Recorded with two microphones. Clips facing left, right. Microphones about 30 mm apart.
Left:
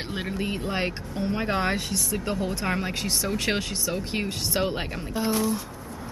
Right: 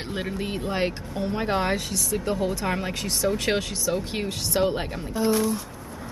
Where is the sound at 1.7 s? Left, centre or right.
Centre.